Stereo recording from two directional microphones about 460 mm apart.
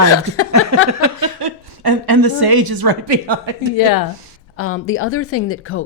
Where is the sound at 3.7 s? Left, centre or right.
Left.